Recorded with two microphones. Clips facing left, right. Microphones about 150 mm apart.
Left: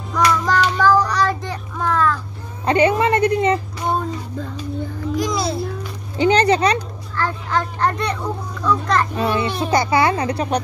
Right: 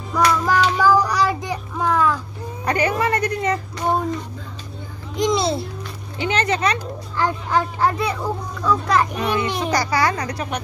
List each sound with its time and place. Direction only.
0.1 s child singing: 5° right (ahead or behind)
2.6 s speech: 25° left (ahead or behind)
5.1 s a child's voice: 25° right (ahead or behind)
6.1 s speech: 35° left (ahead or behind)
7.2 s a child's voice: 15° right (ahead or behind)
9.1 s speech: 25° left (ahead or behind)